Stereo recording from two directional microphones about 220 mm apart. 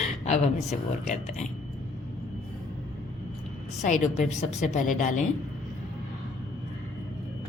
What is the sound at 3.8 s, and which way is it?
A woman's voice, 35° left (ahead or behind).